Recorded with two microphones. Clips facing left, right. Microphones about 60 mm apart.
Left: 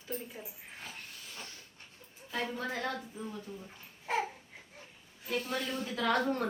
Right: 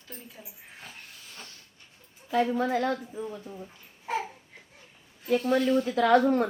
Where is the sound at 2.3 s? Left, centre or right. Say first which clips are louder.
Right 11 dB; right.